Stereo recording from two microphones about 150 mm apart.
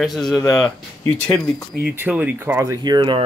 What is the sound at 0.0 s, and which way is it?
Speech, centre (ahead or behind).